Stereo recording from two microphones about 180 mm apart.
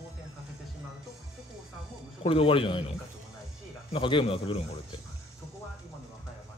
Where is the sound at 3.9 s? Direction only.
30° left (ahead or behind).